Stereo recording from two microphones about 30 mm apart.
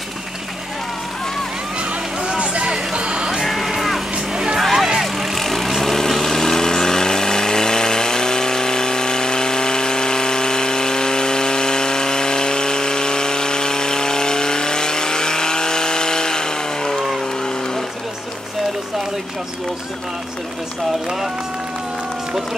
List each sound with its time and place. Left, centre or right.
2.2 s vehicle: right
2.7 s music: right
3.4 s music: centre
4.6 s vehicle: centre; by 17.0 s left